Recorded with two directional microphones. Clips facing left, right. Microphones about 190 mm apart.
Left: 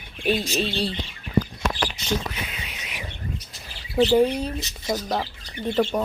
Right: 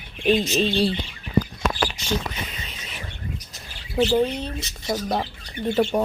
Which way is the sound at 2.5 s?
10° left (ahead or behind).